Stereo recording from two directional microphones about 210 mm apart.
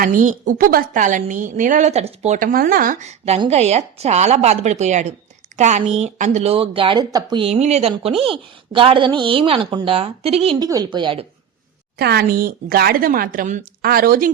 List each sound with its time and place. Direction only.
0.0 s a woman's voice: 40° right (ahead or behind); by 11.3 s 25° right (ahead or behind)
11.9 s a woman's voice: 50° right (ahead or behind)